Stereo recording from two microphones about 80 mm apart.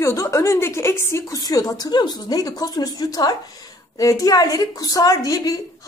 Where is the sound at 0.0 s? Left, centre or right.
Left.